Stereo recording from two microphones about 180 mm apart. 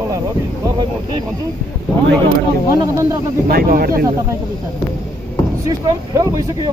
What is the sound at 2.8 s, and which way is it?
Speech, 20° right (ahead or behind).